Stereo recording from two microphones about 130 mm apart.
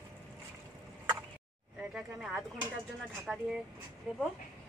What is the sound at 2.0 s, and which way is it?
Speech, 5° right (ahead or behind).